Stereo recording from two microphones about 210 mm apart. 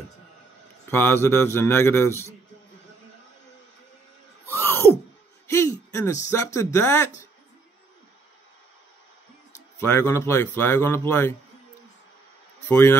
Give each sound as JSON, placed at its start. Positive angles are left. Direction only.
{"t": 0.8, "sound": "a man's voice", "side_deg": 10}
{"t": 4.5, "sound": "a sound", "side_deg": 10}
{"t": 6.3, "sound": "a man's voice", "side_deg": 15}
{"t": 9.8, "sound": "a man's voice", "side_deg": 10}
{"t": 12.6, "sound": "a man's voice", "side_deg": 10}